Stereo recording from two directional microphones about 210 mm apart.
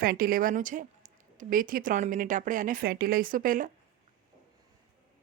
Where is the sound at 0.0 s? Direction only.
45° right (ahead or behind).